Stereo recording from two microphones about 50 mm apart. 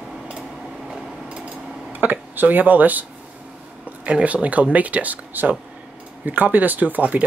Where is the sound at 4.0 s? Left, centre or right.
Right.